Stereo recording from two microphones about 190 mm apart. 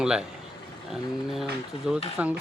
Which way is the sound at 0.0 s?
5° right (ahead or behind).